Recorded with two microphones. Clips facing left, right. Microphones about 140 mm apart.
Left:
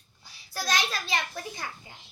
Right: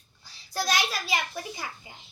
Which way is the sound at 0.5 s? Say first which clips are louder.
Right 2 dB; 10° right (ahead or behind).